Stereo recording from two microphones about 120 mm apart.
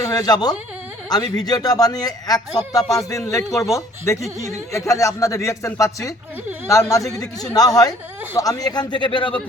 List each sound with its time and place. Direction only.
0.0 s speech: 30° left (ahead or behind)